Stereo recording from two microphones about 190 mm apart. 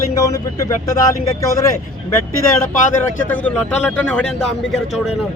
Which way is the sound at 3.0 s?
10° left (ahead or behind).